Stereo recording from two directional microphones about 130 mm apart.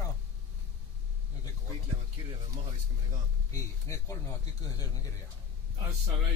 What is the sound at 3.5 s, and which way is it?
Speech, 25° left (ahead or behind).